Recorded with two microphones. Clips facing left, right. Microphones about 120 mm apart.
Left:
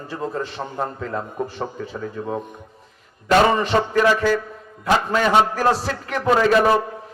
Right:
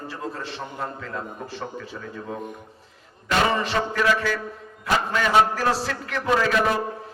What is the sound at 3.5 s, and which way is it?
Speech, 35° left (ahead or behind).